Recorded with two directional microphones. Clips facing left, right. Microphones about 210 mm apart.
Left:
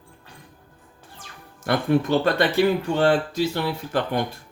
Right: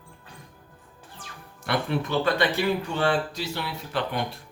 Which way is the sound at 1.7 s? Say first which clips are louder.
Left 6 dB; 45° left (ahead or behind).